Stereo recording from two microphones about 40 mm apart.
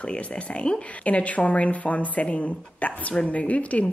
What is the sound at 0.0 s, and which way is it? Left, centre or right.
A woman's voice, left.